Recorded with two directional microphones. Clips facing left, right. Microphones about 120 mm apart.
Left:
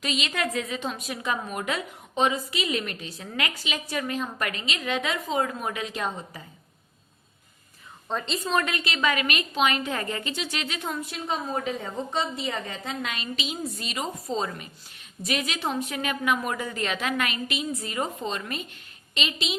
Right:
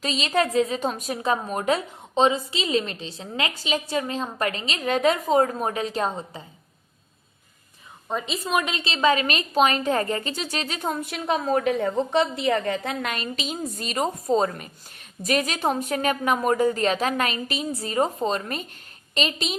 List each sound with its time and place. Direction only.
0.0 s a woman's voice: 35° right (ahead or behind)
8.0 s a woman's voice: 10° right (ahead or behind)
8.7 s a woman's voice: 30° right (ahead or behind)
11.0 s a woman's voice: 70° right (ahead or behind); by 19.5 s 40° right (ahead or behind)